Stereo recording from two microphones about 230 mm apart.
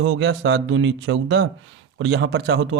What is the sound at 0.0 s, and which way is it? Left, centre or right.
Speech, right.